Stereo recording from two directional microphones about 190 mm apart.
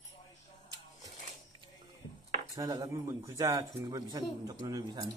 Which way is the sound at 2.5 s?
20° right (ahead or behind).